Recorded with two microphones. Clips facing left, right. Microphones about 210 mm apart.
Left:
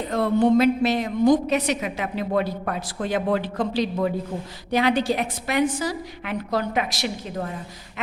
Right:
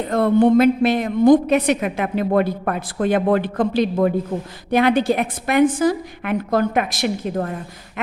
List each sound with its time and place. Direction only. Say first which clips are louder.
0.1 s a woman's voice: right 4 dB; 55° right (ahead or behind)